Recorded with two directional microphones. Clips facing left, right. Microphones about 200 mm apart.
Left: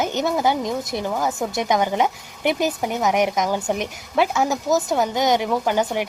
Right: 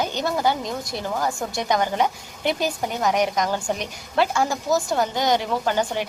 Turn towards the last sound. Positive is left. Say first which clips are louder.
# left 2 dB
turn(degrees=15)  # may be behind; listen again after turning